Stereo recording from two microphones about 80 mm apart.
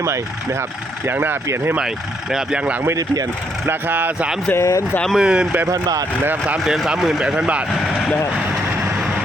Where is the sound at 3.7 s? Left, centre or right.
Right.